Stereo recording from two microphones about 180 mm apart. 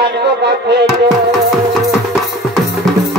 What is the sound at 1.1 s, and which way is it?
Music, centre (ahead or behind).